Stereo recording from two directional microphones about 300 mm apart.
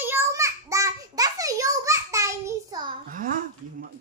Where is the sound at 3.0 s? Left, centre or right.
Right.